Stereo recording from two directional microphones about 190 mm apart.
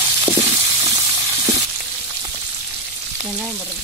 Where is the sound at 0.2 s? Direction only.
30° right (ahead or behind).